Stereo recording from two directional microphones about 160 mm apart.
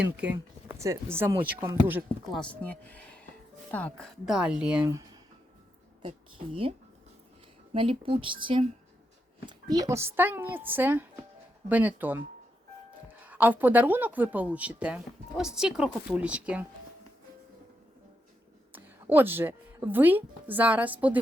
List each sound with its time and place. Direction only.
0.0 s speech: 10° right (ahead or behind)
2.3 s speech: 5° left (ahead or behind)
7.7 s speech: 35° right (ahead or behind); by 12.2 s 10° right (ahead or behind)
13.2 s speech: 10° right (ahead or behind)
18.7 s speech: 10° right (ahead or behind)